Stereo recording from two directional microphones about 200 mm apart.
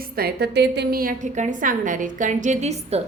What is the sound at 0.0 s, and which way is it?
A woman's voice, 50° right (ahead or behind).